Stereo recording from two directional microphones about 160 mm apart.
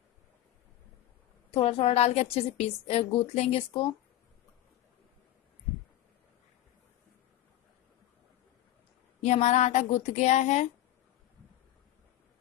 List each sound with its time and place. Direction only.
1.5 s a woman's voice: 35° left (ahead or behind)
9.2 s a woman's voice: 45° left (ahead or behind)